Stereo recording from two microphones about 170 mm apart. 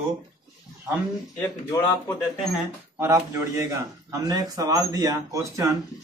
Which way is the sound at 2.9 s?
15° right (ahead or behind).